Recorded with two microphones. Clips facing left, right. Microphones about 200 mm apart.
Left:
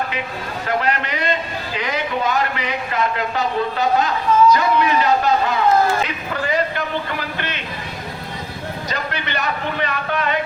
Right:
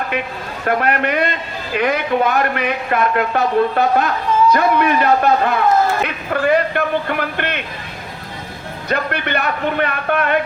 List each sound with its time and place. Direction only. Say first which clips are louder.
0.6 s a man's voice: right 4 dB; 55° right (ahead or behind)
8.9 s a man's voice: right 8 dB; 55° right (ahead or behind)